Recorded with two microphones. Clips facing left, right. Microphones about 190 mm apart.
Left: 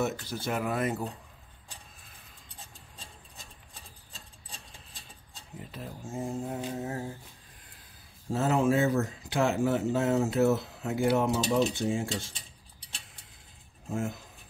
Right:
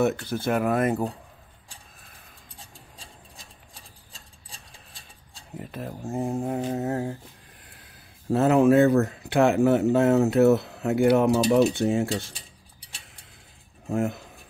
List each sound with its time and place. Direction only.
0.0 s speech: 60° right (ahead or behind)
5.6 s speech: 60° right (ahead or behind)
8.3 s speech: 60° right (ahead or behind)
13.8 s speech: 65° right (ahead or behind)